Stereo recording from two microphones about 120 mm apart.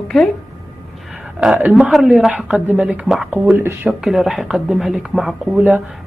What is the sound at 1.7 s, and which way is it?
Speech, centre (ahead or behind).